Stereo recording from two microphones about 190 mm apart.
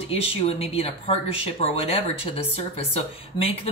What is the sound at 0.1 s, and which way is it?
Speech, 30° left (ahead or behind).